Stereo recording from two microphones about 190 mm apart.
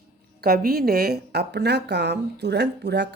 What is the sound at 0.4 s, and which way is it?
A woman's voice, 55° right (ahead or behind).